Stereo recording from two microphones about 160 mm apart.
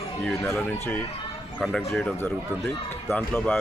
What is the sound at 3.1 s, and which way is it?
Speech, 15° left (ahead or behind).